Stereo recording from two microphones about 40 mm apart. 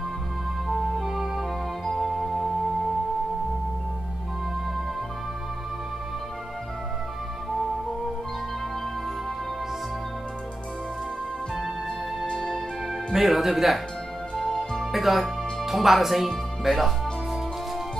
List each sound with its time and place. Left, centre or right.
0.7 s music: centre
12.3 s music: centre
13.1 s speech: centre
14.3 s music: centre
14.9 s speech: centre